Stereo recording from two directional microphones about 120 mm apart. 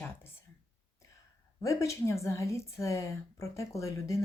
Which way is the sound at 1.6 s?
25° left (ahead or behind).